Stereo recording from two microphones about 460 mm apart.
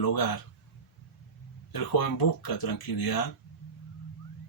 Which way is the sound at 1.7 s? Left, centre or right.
Left.